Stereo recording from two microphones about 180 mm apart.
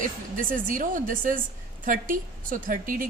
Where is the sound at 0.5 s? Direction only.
45° right (ahead or behind).